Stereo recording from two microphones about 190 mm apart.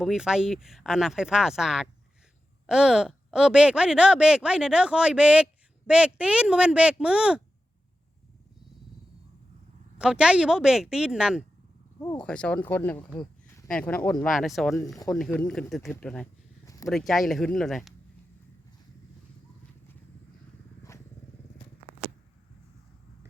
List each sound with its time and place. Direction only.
0.0 s speech: 5° right (ahead or behind)
10.0 s speech: 5° right (ahead or behind)
16.6 s a sound: 15° left (ahead or behind)
16.9 s speech: centre (ahead or behind)